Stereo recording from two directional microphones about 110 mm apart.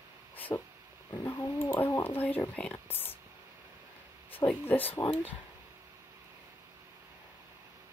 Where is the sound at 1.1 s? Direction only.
20° left (ahead or behind).